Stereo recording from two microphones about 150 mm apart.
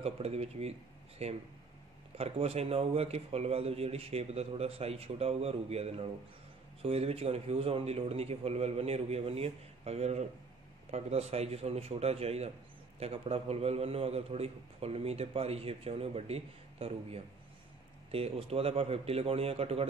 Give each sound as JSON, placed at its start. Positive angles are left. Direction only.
{"t": 0.0, "sound": "a man's voice", "side_deg": -45}